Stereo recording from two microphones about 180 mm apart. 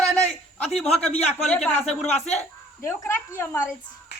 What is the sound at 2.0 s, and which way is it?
Speech, 35° left (ahead or behind).